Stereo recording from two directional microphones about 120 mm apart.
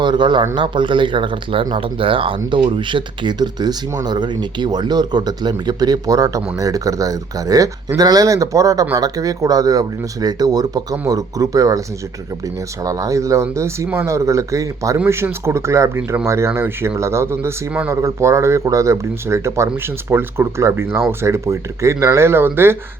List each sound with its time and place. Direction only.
0.0 s a man's voice: 40° right (ahead or behind)
12.8 s speech: 30° right (ahead or behind)